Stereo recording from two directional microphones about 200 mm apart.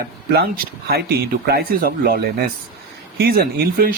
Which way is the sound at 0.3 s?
50° right (ahead or behind).